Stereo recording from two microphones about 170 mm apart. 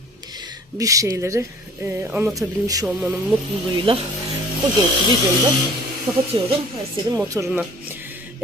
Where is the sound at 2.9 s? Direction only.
Centre (ahead or behind).